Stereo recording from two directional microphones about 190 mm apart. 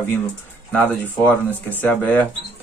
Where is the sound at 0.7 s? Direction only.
10° left (ahead or behind).